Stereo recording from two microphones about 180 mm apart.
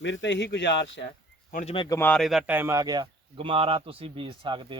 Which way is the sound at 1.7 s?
25° left (ahead or behind).